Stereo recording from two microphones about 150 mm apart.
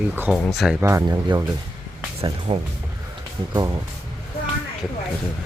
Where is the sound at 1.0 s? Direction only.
25° right (ahead or behind).